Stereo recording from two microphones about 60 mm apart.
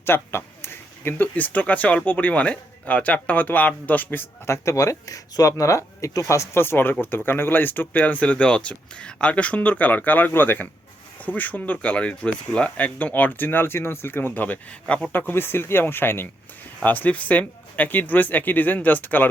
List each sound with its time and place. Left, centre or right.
0.0 s speech: left
4.4 s speech: left
6.6 s speech: left; by 15.1 s centre
15.1 s speech: left